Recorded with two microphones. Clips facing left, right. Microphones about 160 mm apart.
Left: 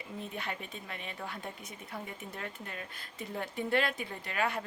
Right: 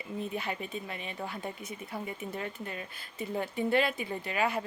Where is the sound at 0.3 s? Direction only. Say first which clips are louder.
Right 5 dB; 5° right (ahead or behind).